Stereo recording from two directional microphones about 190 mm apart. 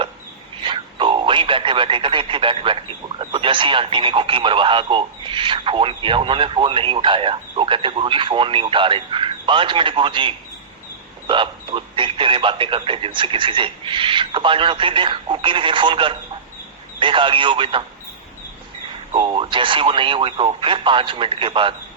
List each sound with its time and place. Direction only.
0.6 s speech: 25° right (ahead or behind)
19.1 s speech: 25° right (ahead or behind)